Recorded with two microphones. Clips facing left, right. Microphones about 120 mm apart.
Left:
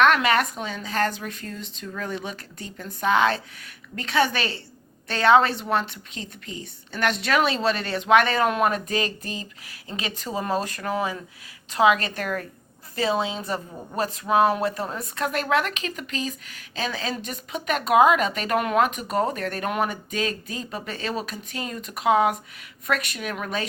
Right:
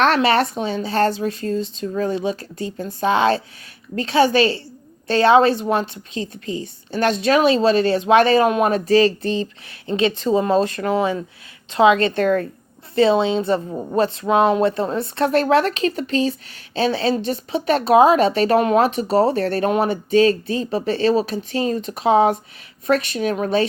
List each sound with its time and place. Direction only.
0.0 s speech: 30° right (ahead or behind)
5.2 s speech: 25° right (ahead or behind)
6.9 s speech: 25° right (ahead or behind)